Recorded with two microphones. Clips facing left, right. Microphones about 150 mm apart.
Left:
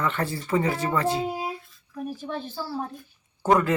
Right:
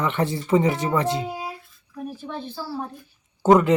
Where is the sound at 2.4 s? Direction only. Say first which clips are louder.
Right 1 dB; 10° left (ahead or behind).